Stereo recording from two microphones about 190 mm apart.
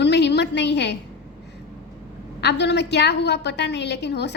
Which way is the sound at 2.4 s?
65° left (ahead or behind).